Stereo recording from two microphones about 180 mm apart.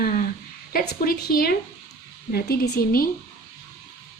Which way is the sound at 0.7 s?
55° left (ahead or behind).